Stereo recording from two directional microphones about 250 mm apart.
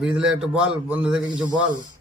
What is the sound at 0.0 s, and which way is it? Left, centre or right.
Speech, centre.